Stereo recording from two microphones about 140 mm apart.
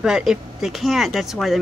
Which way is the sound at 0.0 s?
5° right (ahead or behind).